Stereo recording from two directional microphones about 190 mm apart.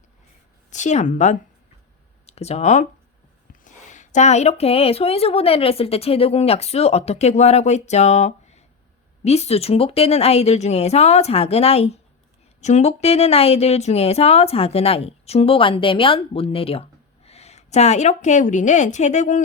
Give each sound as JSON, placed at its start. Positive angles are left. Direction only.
{"t": 0.7, "sound": "speech", "side_deg": 40}